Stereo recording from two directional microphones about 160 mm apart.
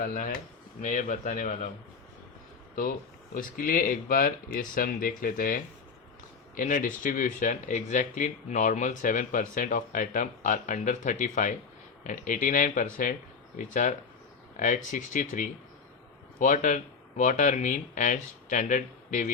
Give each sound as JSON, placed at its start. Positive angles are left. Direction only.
{"t": 0.0, "sound": "speech", "side_deg": 55}
{"t": 3.3, "sound": "speech", "side_deg": 65}